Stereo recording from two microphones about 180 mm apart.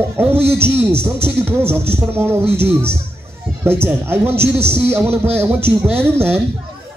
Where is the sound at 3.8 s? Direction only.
10° right (ahead or behind).